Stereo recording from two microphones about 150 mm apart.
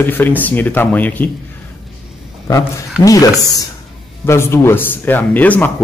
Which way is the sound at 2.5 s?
30° left (ahead or behind).